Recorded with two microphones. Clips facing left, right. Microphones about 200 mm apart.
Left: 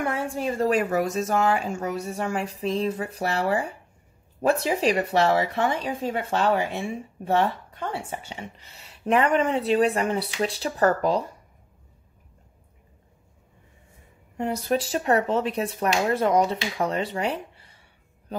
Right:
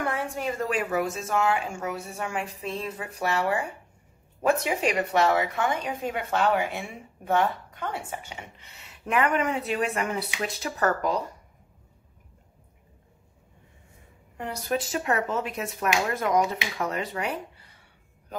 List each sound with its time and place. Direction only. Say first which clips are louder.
0.0 s a sound: left 2 dB; 30° left (ahead or behind)
0.7 s speech: left 5 dB; 40° left (ahead or behind)
14.3 s speech: left 4 dB; 25° left (ahead or behind)